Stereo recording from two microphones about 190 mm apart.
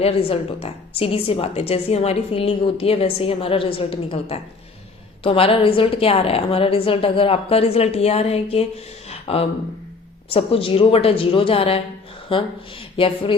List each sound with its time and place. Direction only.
0.0 s a woman's voice: 30° left (ahead or behind)
9.0 s a sound: 30° left (ahead or behind)
10.2 s speech: 30° left (ahead or behind)